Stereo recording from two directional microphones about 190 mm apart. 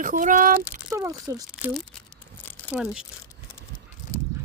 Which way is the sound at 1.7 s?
5° left (ahead or behind).